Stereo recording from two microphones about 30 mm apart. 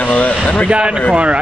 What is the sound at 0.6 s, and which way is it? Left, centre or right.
Speech, right.